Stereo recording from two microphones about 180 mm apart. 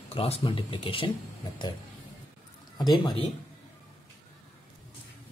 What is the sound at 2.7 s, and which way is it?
Speech, 25° left (ahead or behind).